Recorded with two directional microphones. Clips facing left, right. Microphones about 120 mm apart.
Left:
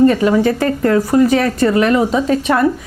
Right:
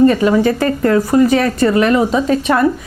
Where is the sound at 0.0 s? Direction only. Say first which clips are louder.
Right 1 dB; 20° right (ahead or behind).